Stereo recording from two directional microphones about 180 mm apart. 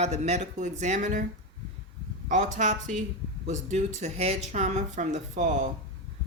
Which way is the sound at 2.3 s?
45° right (ahead or behind).